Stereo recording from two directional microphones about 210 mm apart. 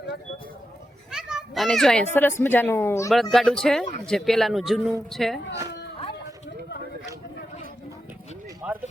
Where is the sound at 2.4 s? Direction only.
10° left (ahead or behind).